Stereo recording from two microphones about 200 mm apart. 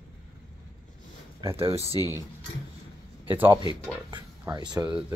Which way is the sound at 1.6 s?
30° right (ahead or behind).